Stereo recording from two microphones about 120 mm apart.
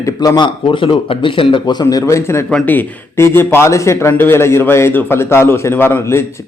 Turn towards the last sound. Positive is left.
turn(degrees=20)  # may be behind; listen again after turning